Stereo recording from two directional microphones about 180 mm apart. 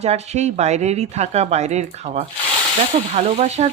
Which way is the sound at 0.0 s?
35° right (ahead or behind).